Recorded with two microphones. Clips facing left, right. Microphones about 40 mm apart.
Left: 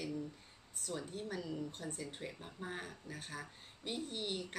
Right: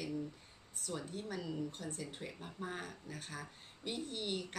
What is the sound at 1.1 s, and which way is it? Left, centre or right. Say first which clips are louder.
Speech: even; centre.